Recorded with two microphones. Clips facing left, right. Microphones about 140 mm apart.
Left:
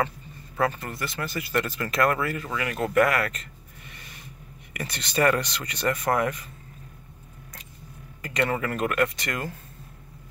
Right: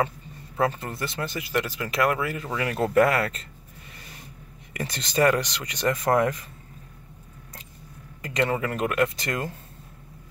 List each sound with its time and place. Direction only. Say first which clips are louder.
0.6 s speech: right 1 dB; 25° right (ahead or behind)
1.5 s speech: left 1 dB; 15° right (ahead or behind); by 3.4 s 30° right (ahead or behind)
4.7 s speech: right 2 dB; 25° right (ahead or behind)
8.2 s speech: right 1 dB; 25° right (ahead or behind)